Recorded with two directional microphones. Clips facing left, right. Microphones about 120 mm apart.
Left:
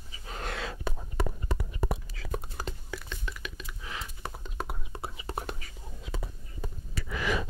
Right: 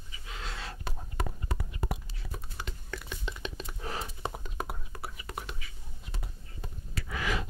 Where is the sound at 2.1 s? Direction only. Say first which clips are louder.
Left 8 dB; 90° left.